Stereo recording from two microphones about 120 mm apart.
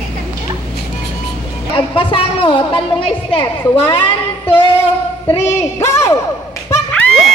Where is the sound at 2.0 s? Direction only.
45° left (ahead or behind).